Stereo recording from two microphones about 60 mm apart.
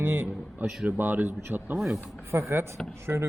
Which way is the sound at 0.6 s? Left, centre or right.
Right.